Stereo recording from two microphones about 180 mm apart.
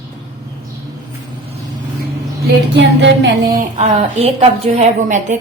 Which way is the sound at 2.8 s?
75° right (ahead or behind).